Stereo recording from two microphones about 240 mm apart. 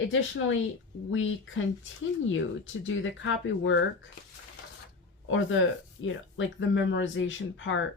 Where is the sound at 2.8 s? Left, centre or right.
Left.